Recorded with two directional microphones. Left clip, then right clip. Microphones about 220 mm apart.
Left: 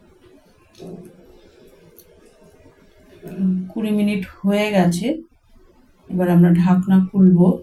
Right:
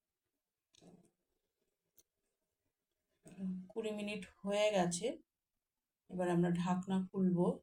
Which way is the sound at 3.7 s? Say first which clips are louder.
Left 17 dB; 15° right (ahead or behind).